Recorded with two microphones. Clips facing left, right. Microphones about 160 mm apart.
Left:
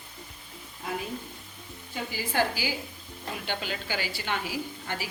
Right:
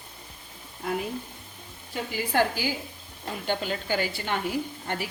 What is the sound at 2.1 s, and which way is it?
A woman's voice, 55° right (ahead or behind).